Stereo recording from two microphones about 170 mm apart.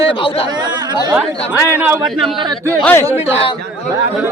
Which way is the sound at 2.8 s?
10° left (ahead or behind).